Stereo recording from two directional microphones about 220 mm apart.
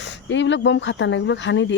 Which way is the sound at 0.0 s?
55° left (ahead or behind).